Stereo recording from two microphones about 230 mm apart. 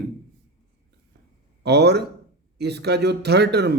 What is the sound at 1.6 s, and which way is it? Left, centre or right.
A man's voice, right.